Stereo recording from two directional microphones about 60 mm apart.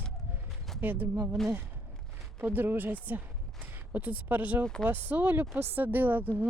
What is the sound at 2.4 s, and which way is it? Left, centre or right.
Speech, right.